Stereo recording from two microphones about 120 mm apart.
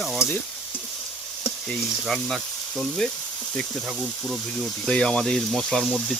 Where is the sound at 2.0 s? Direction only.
Centre (ahead or behind).